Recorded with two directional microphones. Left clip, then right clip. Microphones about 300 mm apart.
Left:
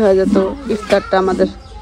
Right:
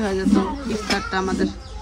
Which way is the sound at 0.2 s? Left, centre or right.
Centre.